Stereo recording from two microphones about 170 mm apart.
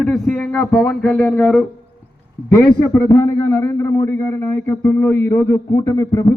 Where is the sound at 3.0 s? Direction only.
20° left (ahead or behind).